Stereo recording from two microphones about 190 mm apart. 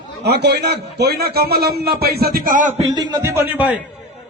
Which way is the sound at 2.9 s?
20° right (ahead or behind).